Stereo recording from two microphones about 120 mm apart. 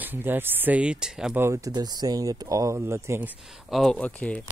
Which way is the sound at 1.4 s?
25° right (ahead or behind).